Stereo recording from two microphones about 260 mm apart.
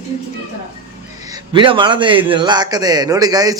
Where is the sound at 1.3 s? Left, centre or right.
Centre.